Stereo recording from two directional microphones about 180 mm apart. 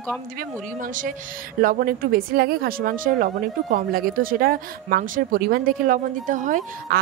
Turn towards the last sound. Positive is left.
turn(degrees=-45)  # may be behind; listen again after turning